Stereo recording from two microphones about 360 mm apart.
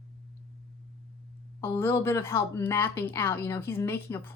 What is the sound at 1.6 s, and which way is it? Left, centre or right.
Speech, centre.